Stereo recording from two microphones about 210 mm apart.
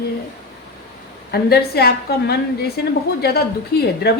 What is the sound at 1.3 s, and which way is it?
A woman's voice, 50° left (ahead or behind).